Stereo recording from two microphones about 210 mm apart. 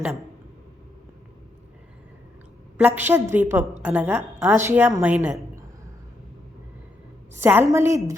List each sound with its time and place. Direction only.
2.8 s a woman's voice: 10° right (ahead or behind)
7.3 s a woman's voice: 10° right (ahead or behind)